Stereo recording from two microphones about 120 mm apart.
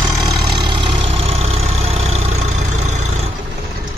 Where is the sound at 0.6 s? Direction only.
40° right (ahead or behind); by 3.0 s 75° right (ahead or behind).